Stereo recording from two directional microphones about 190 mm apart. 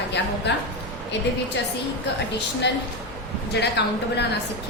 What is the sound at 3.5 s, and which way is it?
Speech, 60° left (ahead or behind).